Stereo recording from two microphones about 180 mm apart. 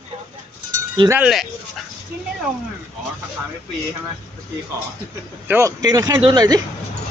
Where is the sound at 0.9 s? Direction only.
20° right (ahead or behind).